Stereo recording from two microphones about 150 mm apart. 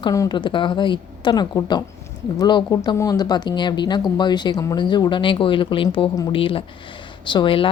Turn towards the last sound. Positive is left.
turn(degrees=35)  # may be behind; listen again after turning